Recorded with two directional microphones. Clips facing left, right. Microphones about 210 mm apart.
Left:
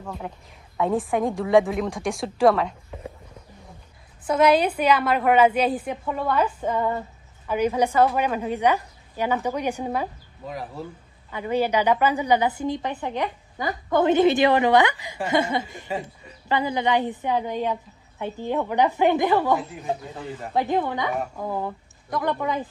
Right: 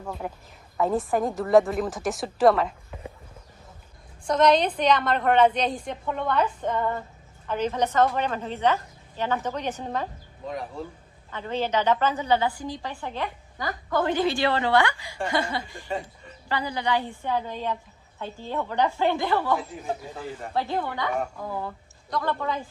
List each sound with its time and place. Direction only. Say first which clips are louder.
0.0 s a woman's voice: right 1 dB; centre (ahead or behind)
4.2 s a woman's voice: left 2 dB; 5° left (ahead or behind)
20.5 s a woman's voice: left 5 dB; 15° left (ahead or behind)